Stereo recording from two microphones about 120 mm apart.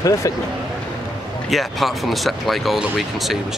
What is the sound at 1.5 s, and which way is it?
Speech, centre (ahead or behind).